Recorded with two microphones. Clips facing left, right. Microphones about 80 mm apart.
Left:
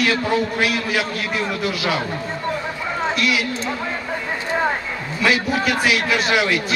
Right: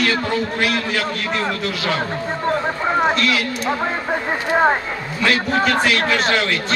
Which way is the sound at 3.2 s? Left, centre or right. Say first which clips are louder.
Right 1 dB; centre.